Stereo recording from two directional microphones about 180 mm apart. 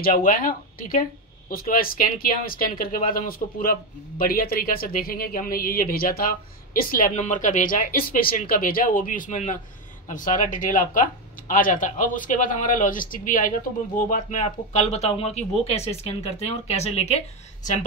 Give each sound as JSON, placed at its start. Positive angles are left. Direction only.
{"t": 0.0, "sound": "speech", "side_deg": 50}